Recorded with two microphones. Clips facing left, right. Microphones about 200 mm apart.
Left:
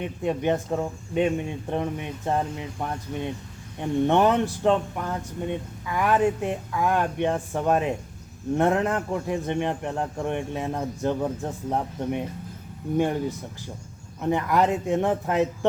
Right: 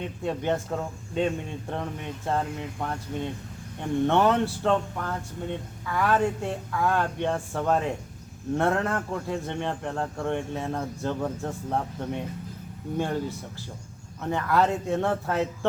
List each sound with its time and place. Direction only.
0.0 s speech: 15° left (ahead or behind)